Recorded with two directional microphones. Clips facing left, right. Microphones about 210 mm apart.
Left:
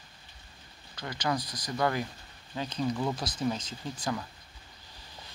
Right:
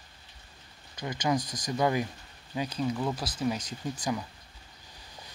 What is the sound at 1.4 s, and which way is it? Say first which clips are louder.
Speech: right 3 dB; 45° right (ahead or behind).